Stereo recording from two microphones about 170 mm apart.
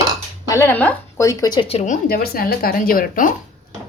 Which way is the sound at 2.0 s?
65° left (ahead or behind).